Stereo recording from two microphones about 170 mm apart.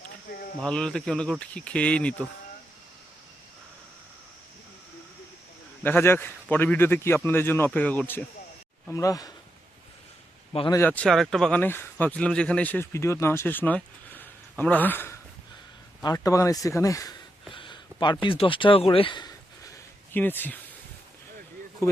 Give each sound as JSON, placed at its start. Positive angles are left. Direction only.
{"t": 0.3, "sound": "speech", "side_deg": 80}
{"t": 0.6, "sound": "speech", "side_deg": 5}
{"t": 5.8, "sound": "speech", "side_deg": 15}
{"t": 10.7, "sound": "speech", "side_deg": 15}
{"t": 17.5, "sound": "a sound", "side_deg": 30}
{"t": 18.3, "sound": "speech", "side_deg": 30}
{"t": 20.1, "sound": "speech", "side_deg": 10}